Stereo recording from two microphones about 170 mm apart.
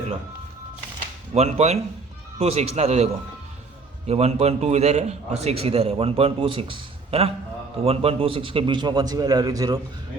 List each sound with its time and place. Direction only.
1.3 s a man's voice: 40° right (ahead or behind); by 9.8 s 20° right (ahead or behind)